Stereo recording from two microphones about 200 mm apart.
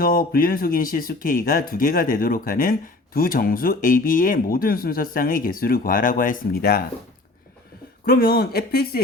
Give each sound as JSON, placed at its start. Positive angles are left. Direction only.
{"t": 0.0, "sound": "speech", "side_deg": 45}
{"t": 8.0, "sound": "speech", "side_deg": 50}